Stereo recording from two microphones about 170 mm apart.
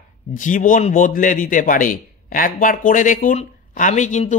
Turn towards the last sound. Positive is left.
turn(degrees=45)  # may be behind; listen again after turning